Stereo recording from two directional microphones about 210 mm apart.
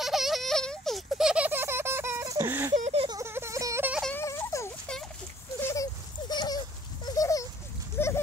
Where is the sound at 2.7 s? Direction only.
30° right (ahead or behind).